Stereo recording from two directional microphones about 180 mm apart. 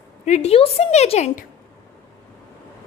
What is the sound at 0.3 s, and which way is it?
A woman's voice, 40° left (ahead or behind).